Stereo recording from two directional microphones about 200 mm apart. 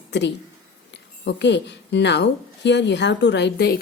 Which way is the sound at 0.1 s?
60° left (ahead or behind).